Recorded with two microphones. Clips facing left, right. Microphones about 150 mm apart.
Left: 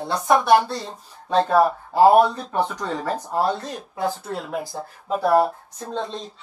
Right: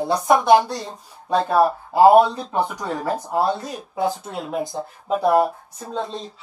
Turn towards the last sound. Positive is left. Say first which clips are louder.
# right 1 dB
turn(degrees=-5)  # may be behind; listen again after turning